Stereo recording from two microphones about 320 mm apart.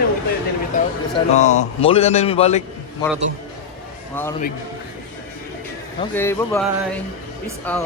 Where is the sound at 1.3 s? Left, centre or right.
Left.